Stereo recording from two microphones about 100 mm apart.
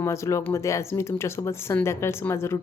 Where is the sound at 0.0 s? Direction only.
30° left (ahead or behind).